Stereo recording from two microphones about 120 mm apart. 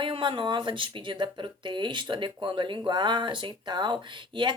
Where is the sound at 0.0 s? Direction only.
45° right (ahead or behind).